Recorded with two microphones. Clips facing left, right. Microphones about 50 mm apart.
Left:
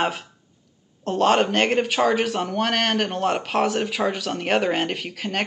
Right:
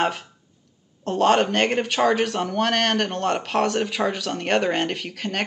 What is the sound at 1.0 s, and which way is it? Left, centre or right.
Speech, centre.